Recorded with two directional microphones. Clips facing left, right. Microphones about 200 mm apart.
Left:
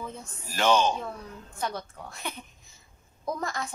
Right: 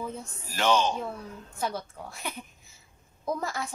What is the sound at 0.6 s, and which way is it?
Speech, 50° left (ahead or behind).